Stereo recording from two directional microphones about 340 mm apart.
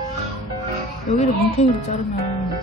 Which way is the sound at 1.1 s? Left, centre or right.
Centre.